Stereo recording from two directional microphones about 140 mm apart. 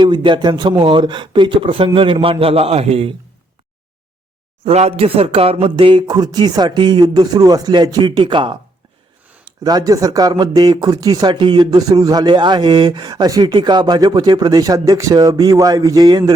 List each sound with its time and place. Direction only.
0.0 s speech: 35° right (ahead or behind)
4.6 s speech: 50° right (ahead or behind); by 16.3 s 30° right (ahead or behind)